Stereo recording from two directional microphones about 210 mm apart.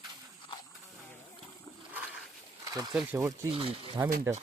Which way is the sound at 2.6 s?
15° right (ahead or behind).